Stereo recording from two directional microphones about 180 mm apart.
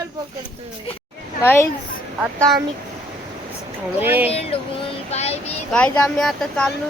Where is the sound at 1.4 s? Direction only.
15° left (ahead or behind).